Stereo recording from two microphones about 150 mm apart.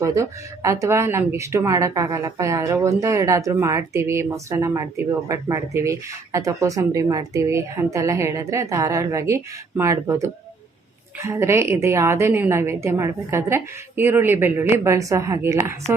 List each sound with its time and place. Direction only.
0.0 s a woman's voice: 20° right (ahead or behind)